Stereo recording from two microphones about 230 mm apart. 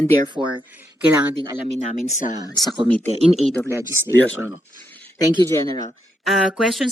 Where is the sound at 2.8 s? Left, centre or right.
Right.